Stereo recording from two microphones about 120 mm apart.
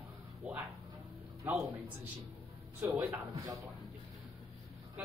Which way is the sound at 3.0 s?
15° right (ahead or behind).